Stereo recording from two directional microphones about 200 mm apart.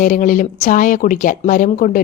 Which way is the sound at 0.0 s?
40° left (ahead or behind).